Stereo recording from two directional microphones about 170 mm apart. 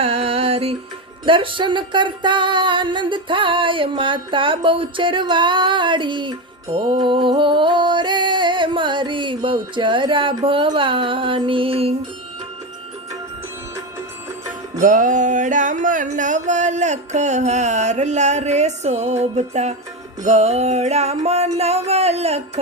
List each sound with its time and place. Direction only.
0.0 s music: 35° right (ahead or behind)
14.8 s music: 50° right (ahead or behind)